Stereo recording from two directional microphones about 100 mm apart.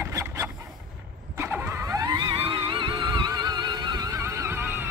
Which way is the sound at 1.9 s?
40° right (ahead or behind).